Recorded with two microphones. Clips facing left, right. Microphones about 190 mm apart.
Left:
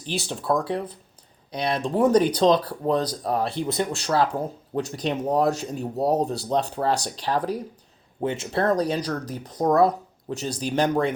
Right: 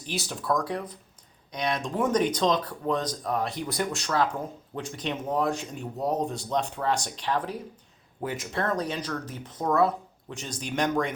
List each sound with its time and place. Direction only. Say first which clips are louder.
0.0 s speech: left 4 dB; 30° left (ahead or behind)
8.2 s speech: left 6 dB; 25° left (ahead or behind)